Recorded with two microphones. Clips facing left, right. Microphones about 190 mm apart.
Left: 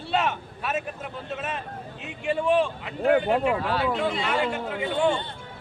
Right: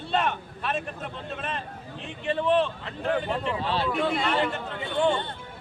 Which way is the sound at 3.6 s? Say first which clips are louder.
Left 1 dB; 30° right (ahead or behind).